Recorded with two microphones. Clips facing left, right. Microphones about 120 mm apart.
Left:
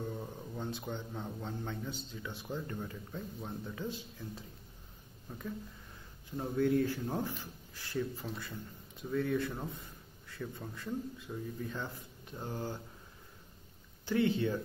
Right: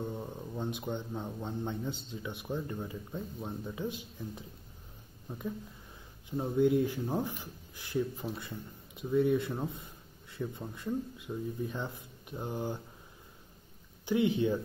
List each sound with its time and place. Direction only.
0.0 s a man's voice: 15° right (ahead or behind)
14.0 s speech: 15° right (ahead or behind)